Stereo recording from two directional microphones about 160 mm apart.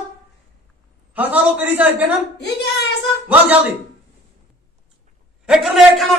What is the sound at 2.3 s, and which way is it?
Speech, 90° left.